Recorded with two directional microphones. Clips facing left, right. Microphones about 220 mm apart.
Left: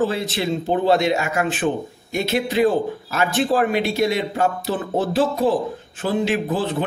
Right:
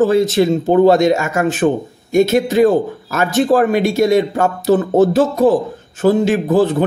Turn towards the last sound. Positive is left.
turn(degrees=-45)  # may be behind; listen again after turning